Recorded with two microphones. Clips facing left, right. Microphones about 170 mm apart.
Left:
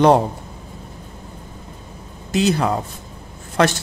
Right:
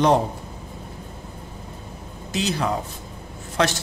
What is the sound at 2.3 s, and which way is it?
Speech, 55° left (ahead or behind).